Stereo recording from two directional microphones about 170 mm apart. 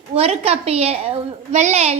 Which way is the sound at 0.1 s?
35° right (ahead or behind).